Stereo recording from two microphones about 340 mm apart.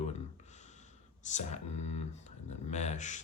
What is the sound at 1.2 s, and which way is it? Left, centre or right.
Speech, centre.